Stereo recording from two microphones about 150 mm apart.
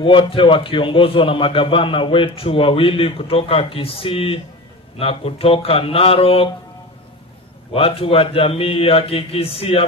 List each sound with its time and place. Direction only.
0.0 s a man's voice: 35° left (ahead or behind)
7.7 s a man's voice: 40° left (ahead or behind)